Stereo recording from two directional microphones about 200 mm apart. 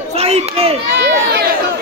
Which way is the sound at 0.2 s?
30° right (ahead or behind).